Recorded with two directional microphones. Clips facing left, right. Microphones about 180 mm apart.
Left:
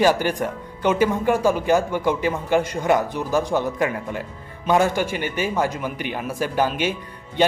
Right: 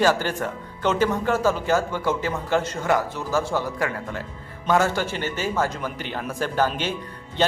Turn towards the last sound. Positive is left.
turn(degrees=15)  # may be behind; listen again after turning